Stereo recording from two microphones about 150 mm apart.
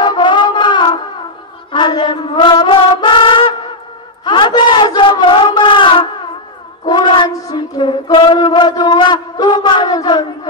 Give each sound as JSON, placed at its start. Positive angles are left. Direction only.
{"t": 0.0, "sound": "music", "side_deg": 30}
{"t": 4.2, "sound": "a sound", "side_deg": 30}
{"t": 6.9, "sound": "child singing", "side_deg": 35}